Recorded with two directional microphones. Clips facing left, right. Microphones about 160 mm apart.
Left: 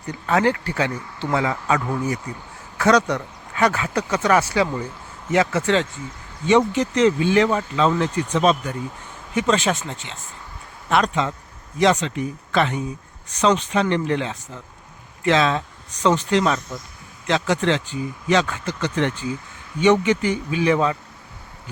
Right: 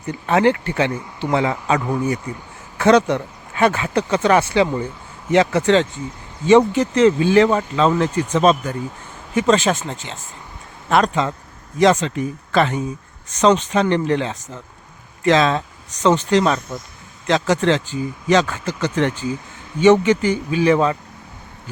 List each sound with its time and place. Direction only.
0.1 s speech: 20° right (ahead or behind)
6.5 s speech: 45° right (ahead or behind)